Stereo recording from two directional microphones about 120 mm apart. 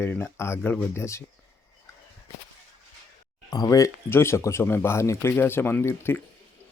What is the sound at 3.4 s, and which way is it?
Speech, 30° left (ahead or behind).